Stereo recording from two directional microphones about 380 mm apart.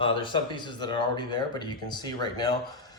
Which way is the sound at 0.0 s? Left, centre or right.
Centre.